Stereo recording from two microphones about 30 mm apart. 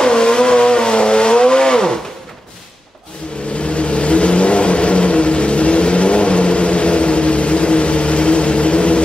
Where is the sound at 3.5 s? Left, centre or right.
Left.